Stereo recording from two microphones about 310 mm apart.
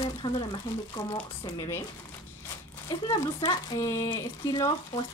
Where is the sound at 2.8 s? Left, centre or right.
Centre.